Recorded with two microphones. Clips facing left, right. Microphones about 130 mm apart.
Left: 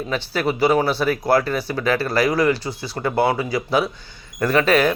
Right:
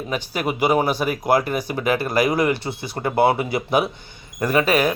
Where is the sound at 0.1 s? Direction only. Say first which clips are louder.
Left 2 dB; 15° right (ahead or behind).